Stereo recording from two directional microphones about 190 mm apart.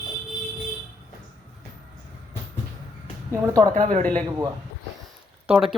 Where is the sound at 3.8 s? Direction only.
40° right (ahead or behind).